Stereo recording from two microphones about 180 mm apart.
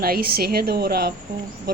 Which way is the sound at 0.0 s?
55° right (ahead or behind).